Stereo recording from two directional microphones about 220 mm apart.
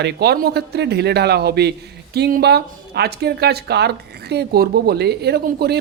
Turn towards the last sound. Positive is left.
turn(degrees=-45)  # may be behind; listen again after turning